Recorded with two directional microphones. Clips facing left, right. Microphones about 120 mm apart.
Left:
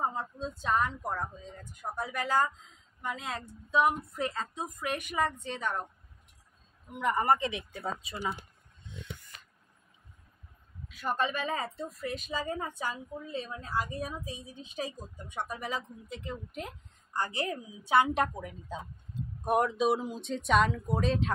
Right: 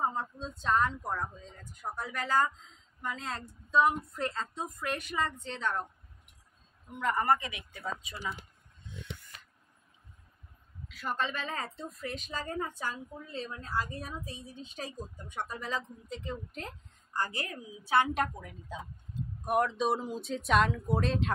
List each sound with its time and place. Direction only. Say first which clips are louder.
0.1 s a woman's voice: left 1 dB; 10° left (ahead or behind)
7.0 s speech: left 2 dB; 20° left (ahead or behind)
10.9 s a woman's voice: left 3 dB; 15° left (ahead or behind)
19.7 s speech: left 2 dB; 5° left (ahead or behind)